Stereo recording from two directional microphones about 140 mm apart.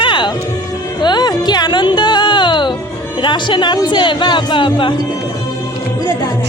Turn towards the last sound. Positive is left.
turn(degrees=25)  # may be behind; listen again after turning